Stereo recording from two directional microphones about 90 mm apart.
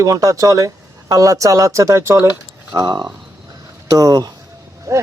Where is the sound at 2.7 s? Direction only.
45° right (ahead or behind).